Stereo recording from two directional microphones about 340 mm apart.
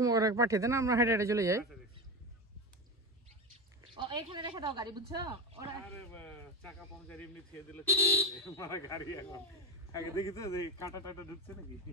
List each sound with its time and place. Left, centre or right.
0.0 s speech: centre
3.9 s speech: centre
6.1 s speech: centre